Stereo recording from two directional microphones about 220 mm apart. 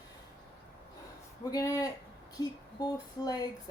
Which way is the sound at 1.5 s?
15° left (ahead or behind).